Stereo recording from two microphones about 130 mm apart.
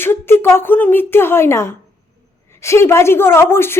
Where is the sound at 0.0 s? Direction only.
15° left (ahead or behind).